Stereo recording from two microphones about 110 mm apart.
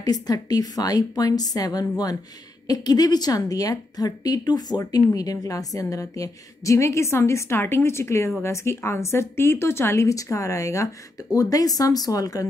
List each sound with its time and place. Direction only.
0.0 s a woman's voice: 35° left (ahead or behind)